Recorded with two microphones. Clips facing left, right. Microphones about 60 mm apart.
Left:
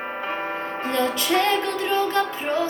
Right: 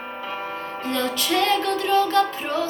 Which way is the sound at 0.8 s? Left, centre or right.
Left.